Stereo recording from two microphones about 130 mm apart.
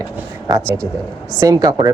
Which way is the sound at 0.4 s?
30° right (ahead or behind).